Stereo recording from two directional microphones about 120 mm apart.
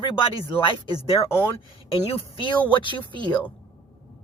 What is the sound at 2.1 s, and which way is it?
Speech, 45° left (ahead or behind).